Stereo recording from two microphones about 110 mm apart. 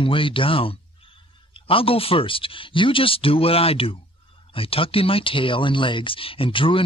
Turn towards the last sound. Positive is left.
turn(degrees=55)  # may be behind; listen again after turning